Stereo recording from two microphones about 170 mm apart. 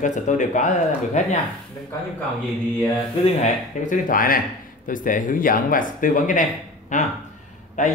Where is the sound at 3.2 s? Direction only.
45° left (ahead or behind).